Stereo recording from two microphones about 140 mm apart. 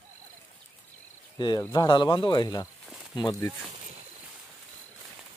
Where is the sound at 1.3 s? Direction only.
30° left (ahead or behind).